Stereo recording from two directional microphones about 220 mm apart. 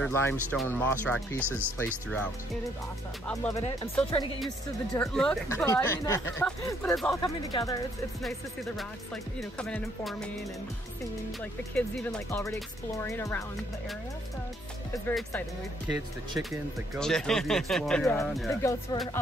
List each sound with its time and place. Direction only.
0.0 s speech: 10° left (ahead or behind)
3.5 s speech: 25° left (ahead or behind)
4.9 s speech: 5° left (ahead or behind)
7.5 s speech: 15° left (ahead or behind)
8.2 s speech: centre (ahead or behind)
11.7 s speech: 5° left (ahead or behind)
15.0 s speech: 5° left (ahead or behind)
18.5 s speech: 15° left (ahead or behind)